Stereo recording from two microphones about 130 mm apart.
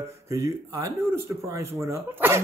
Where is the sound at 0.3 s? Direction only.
25° right (ahead or behind).